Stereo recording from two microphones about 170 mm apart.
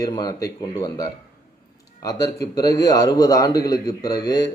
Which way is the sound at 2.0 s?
20° left (ahead or behind).